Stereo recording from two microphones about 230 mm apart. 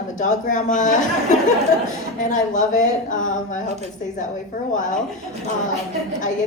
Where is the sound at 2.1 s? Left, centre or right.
Left.